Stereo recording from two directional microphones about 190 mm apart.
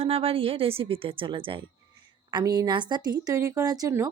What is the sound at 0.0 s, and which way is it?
A woman's voice, 30° right (ahead or behind).